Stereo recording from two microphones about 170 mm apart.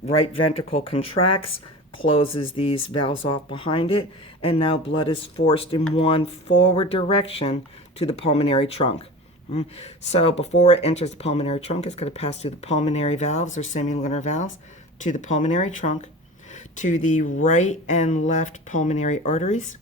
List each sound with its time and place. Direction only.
0.7 s speech: 35° left (ahead or behind)